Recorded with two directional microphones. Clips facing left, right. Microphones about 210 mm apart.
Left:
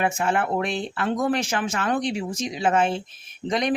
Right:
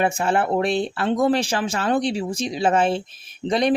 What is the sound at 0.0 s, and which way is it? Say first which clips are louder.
Speech: right 3 dB; 30° right (ahead or behind).